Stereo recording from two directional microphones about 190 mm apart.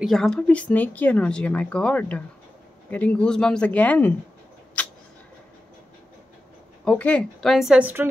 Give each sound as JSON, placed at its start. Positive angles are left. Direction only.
{"t": 0.0, "sound": "a woman's voice", "side_deg": 0}
{"t": 4.8, "sound": "a sound", "side_deg": 5}
{"t": 6.8, "sound": "speech", "side_deg": 5}